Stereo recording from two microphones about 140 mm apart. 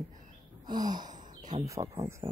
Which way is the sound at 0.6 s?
30° right (ahead or behind).